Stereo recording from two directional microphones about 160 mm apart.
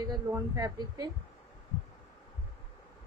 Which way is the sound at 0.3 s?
20° right (ahead or behind).